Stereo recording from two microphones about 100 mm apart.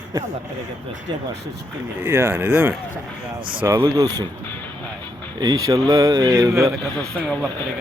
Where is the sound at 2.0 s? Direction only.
25° right (ahead or behind).